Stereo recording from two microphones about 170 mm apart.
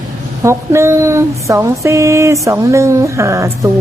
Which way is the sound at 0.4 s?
15° right (ahead or behind).